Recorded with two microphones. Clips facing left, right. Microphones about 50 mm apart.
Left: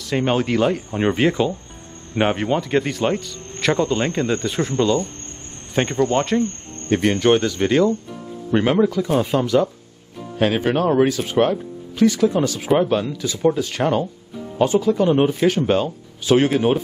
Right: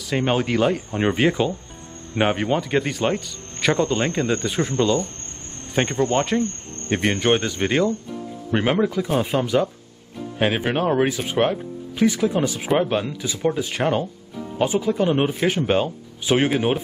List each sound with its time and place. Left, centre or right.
0.1 s speech: centre
6.9 s speech: centre